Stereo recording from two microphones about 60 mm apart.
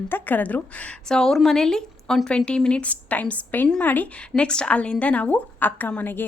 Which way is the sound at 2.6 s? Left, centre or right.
Centre.